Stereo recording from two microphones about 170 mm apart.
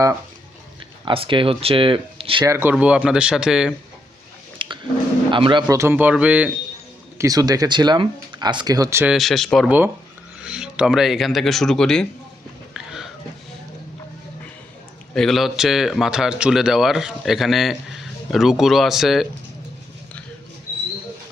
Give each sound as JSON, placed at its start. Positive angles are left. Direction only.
{"t": 1.0, "sound": "speech", "side_deg": -30}
{"t": 2.4, "sound": "a man's voice", "side_deg": -15}
{"t": 4.5, "sound": "a sound", "side_deg": -30}
{"t": 5.3, "sound": "speech", "side_deg": -30}
{"t": 7.2, "sound": "speech", "side_deg": -20}
{"t": 9.1, "sound": "a man's voice", "side_deg": 0}
{"t": 12.7, "sound": "a sound", "side_deg": -5}
{"t": 15.1, "sound": "a man's voice", "side_deg": 0}